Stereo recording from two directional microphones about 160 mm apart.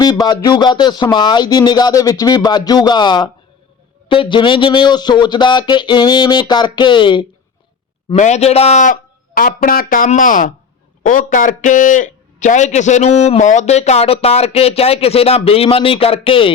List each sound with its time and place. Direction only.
0.0 s speech: 25° left (ahead or behind)
8.1 s a man's voice: 45° left (ahead or behind)